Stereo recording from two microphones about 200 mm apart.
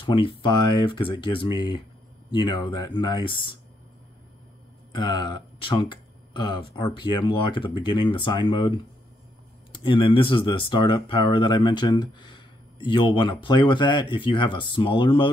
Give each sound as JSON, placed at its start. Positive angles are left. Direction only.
{"t": 0.1, "sound": "speech", "side_deg": 25}
{"t": 4.9, "sound": "speech", "side_deg": 20}